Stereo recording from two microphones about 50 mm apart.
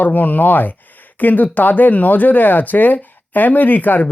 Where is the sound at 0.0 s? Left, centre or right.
Left.